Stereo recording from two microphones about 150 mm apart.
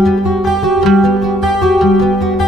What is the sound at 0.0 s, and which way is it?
Music, centre (ahead or behind).